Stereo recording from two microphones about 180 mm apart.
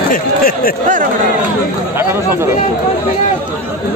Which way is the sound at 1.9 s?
15° right (ahead or behind).